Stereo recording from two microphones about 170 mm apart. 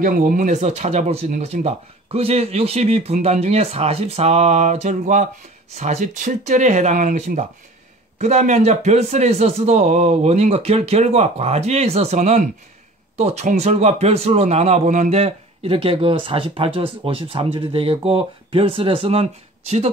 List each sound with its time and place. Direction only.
0.0 s speech: 55° right (ahead or behind)